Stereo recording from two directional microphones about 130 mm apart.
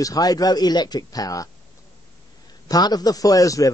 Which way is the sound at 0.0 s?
30° left (ahead or behind).